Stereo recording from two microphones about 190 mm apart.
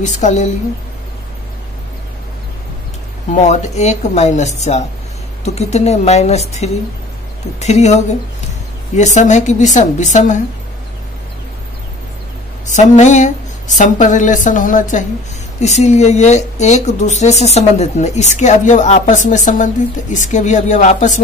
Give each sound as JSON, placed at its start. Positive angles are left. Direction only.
{"t": 0.0, "sound": "speech", "side_deg": 35}
{"t": 3.4, "sound": "speech", "side_deg": 35}
{"t": 12.9, "sound": "speech", "side_deg": 40}